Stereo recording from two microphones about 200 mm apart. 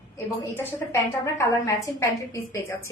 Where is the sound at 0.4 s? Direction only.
10° left (ahead or behind).